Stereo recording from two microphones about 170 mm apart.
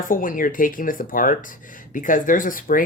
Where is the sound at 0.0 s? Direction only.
55° left (ahead or behind).